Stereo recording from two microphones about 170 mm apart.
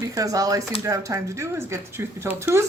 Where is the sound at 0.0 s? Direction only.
20° right (ahead or behind).